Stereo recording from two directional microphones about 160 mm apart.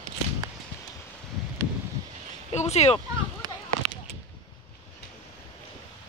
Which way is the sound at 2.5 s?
40° left (ahead or behind).